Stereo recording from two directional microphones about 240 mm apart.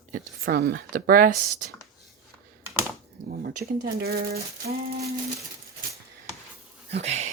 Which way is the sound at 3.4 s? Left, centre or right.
Right.